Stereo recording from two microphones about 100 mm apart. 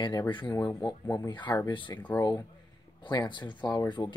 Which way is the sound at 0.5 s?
30° left (ahead or behind).